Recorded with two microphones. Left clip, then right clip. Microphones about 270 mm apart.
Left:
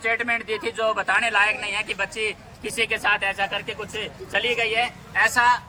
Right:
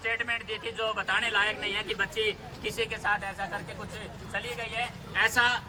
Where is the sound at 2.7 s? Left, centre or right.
Left.